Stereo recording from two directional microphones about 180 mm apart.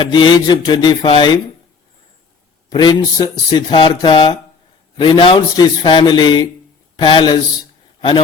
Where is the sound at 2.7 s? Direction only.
25° left (ahead or behind).